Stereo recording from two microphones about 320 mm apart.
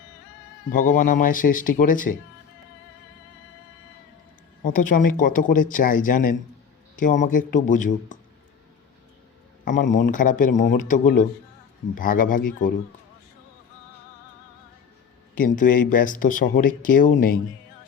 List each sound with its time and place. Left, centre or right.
0.7 s speech: left
4.6 s speech: left
9.6 s speech: left
15.4 s speech: left